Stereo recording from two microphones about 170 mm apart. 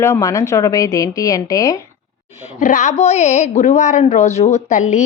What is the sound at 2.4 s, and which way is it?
Speech, 45° left (ahead or behind).